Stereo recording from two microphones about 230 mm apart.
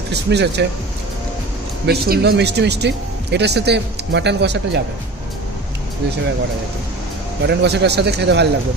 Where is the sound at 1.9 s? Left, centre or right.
Right.